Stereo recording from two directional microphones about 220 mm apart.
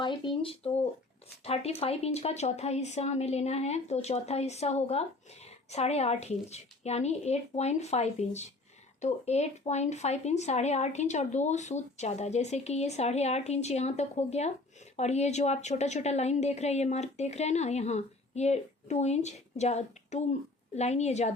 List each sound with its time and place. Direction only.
0.0 s a woman's voice: 25° left (ahead or behind)